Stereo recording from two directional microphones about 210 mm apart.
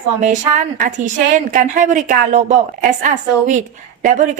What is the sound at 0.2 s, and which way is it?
Speech, 40° right (ahead or behind).